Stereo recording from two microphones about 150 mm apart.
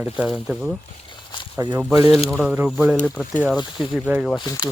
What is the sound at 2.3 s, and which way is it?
Speech, centre (ahead or behind).